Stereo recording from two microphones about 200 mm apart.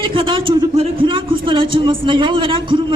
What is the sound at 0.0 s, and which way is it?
A man's voice, 25° right (ahead or behind).